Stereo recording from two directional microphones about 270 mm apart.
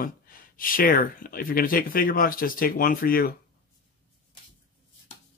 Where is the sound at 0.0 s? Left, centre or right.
Left.